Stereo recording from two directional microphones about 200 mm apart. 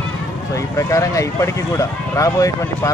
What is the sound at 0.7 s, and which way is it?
Speech, 15° left (ahead or behind).